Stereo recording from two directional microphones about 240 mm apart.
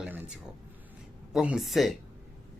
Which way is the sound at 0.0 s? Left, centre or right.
Centre.